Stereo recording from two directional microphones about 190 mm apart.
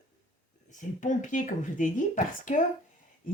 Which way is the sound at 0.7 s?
40° left (ahead or behind).